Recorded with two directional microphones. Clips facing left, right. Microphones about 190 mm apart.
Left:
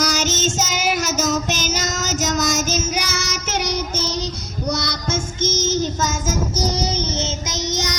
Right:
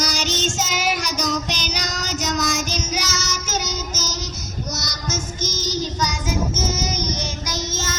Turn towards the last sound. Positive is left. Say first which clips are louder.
# left 3 dB
turn(degrees=15)  # may be behind; listen again after turning